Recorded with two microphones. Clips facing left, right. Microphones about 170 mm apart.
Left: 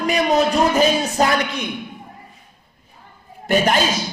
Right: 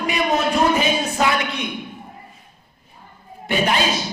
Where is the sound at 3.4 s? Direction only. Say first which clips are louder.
Left 3 dB; 45° left (ahead or behind).